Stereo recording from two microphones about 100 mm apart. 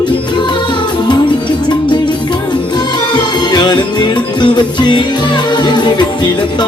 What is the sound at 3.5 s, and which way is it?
Music, 45° left (ahead or behind).